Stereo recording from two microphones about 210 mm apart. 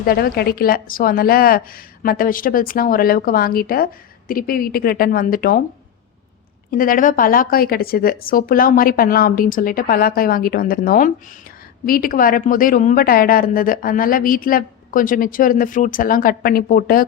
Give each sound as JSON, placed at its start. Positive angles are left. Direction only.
{"t": 0.0, "sound": "speech", "side_deg": 45}
{"t": 6.7, "sound": "a woman's voice", "side_deg": 40}